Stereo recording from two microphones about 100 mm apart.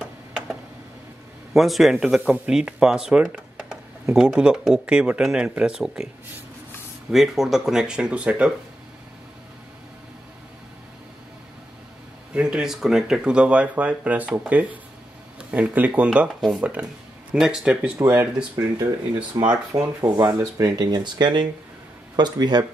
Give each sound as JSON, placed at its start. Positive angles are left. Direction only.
{"t": 1.5, "sound": "speech", "side_deg": 0}
{"t": 7.1, "sound": "speech", "side_deg": -5}
{"t": 12.4, "sound": "speech", "side_deg": -10}
{"t": 16.3, "sound": "speech", "side_deg": 0}
{"t": 17.9, "sound": "speech", "side_deg": -25}
{"t": 19.4, "sound": "speech", "side_deg": -35}
{"t": 20.7, "sound": "speech", "side_deg": -45}